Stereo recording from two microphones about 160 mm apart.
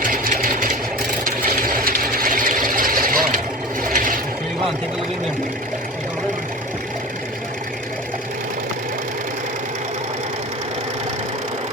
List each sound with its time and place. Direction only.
0.0 s sewing machine: 60° right (ahead or behind)
3.8 s vehicle: 60° right (ahead or behind)